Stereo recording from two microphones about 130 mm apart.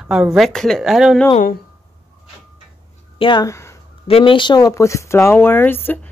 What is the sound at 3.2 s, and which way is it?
A woman's voice, 35° left (ahead or behind).